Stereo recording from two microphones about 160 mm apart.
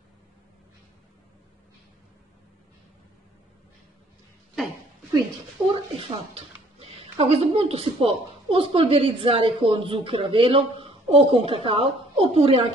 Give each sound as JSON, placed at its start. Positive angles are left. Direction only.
{"t": 5.8, "sound": "speech", "side_deg": -35}